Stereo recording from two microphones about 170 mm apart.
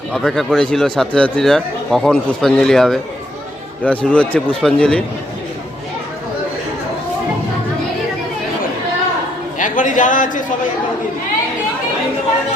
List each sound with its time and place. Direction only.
0.1 s a man's voice: centre (ahead or behind)
9.6 s a man's voice: 50° left (ahead or behind)